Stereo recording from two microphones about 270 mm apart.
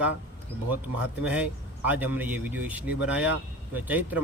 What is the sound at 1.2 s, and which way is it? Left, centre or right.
Speech, centre.